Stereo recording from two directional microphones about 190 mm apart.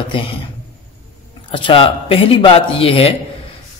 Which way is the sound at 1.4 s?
25° left (ahead or behind).